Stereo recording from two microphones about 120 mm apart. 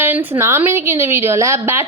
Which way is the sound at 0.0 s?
20° right (ahead or behind).